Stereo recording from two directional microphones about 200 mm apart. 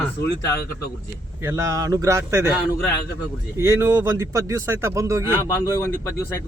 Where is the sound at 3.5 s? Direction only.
15° right (ahead or behind).